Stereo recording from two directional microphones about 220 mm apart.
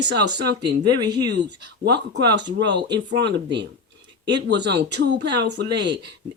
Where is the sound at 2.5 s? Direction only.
50° right (ahead or behind).